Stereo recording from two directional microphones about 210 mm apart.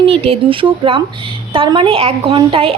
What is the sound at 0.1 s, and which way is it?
A woman's voice, 25° right (ahead or behind).